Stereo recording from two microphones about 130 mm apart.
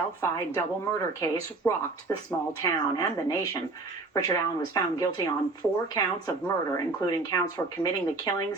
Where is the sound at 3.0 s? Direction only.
25° left (ahead or behind).